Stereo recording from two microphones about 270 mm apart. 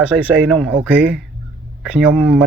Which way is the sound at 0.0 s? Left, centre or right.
Centre.